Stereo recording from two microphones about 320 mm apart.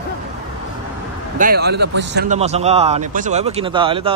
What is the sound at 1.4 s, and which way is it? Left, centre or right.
A man's voice, right.